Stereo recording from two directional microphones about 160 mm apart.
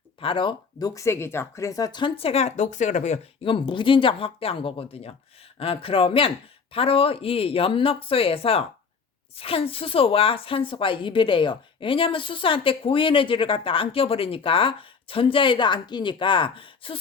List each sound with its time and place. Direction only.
0.2 s speech: 35° left (ahead or behind)
3.5 s speech: 30° left (ahead or behind)